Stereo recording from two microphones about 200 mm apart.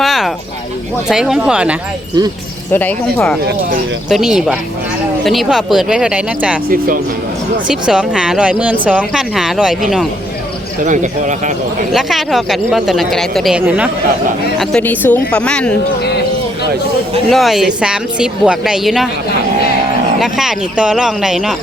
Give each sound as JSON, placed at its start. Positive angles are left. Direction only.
{"t": 0.0, "sound": "a sound", "side_deg": 0}
{"t": 1.1, "sound": "speech", "side_deg": -5}
{"t": 2.7, "sound": "speech", "side_deg": 10}
{"t": 4.1, "sound": "speech", "side_deg": -5}
{"t": 6.7, "sound": "speech", "side_deg": -45}
{"t": 7.7, "sound": "speech", "side_deg": -5}
{"t": 10.8, "sound": "speech", "side_deg": -40}
{"t": 11.9, "sound": "speech", "side_deg": 0}
{"t": 14.6, "sound": "speech", "side_deg": 5}
{"t": 17.2, "sound": "speech", "side_deg": 0}
{"t": 20.1, "sound": "speech", "side_deg": 0}